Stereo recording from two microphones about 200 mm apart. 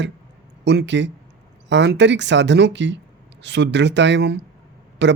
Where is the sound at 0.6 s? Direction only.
60° right (ahead or behind).